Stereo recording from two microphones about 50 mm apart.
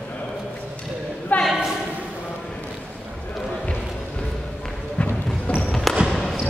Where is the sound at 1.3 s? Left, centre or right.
Left.